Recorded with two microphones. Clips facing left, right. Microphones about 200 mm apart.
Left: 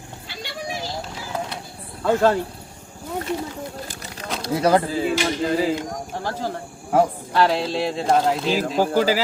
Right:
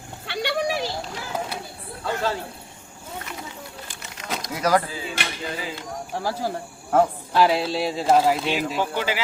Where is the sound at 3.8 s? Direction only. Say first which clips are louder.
Left 5 dB; 35° left (ahead or behind).